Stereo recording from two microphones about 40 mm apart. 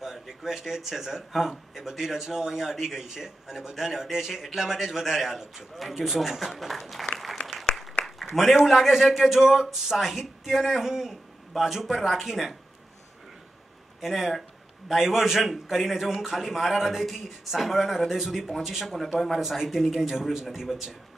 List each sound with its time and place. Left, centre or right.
0.0 s speech: centre
8.0 s a sound: centre
8.6 s speech: centre
14.0 s speech: centre
19.4 s speech: centre